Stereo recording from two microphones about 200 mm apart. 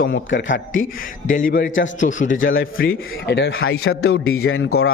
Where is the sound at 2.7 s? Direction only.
50° left (ahead or behind).